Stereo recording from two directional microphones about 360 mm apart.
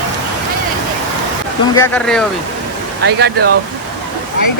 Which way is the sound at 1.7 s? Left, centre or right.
Centre.